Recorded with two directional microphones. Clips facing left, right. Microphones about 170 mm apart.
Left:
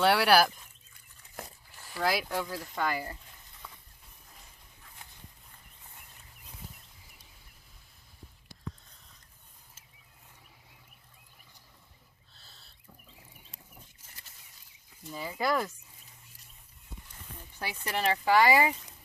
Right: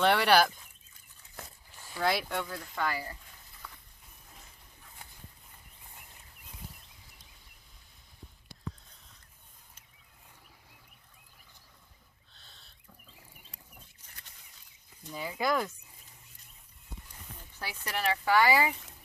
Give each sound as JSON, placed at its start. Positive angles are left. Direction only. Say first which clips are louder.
{"t": 0.0, "sound": "speech", "louder": "left 1 dB", "side_deg": 5}
{"t": 2.0, "sound": "speech", "louder": "even", "side_deg": 0}
{"t": 2.7, "sound": "speech", "louder": "left 1 dB", "side_deg": 20}
{"t": 3.6, "sound": "a sound", "louder": "even", "side_deg": 25}
{"t": 12.3, "sound": "a sound", "louder": "even", "side_deg": 0}
{"t": 15.0, "sound": "speech", "louder": "even", "side_deg": 0}
{"t": 17.6, "sound": "speech", "louder": "left 2 dB", "side_deg": 15}